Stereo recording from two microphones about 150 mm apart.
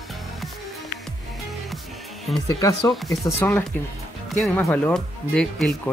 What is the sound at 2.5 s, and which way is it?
Speech, 25° left (ahead or behind).